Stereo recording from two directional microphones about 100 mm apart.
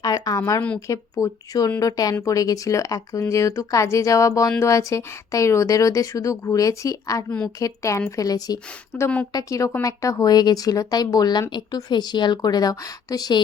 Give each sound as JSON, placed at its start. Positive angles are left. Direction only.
{"t": 0.0, "sound": "a sound", "side_deg": 40}
{"t": 0.9, "sound": "speech", "side_deg": 35}
{"t": 7.3, "sound": "a woman's voice", "side_deg": 10}
{"t": 7.6, "sound": "speech", "side_deg": 30}
{"t": 8.9, "sound": "a woman's voice", "side_deg": 10}
{"t": 9.3, "sound": "speech", "side_deg": 35}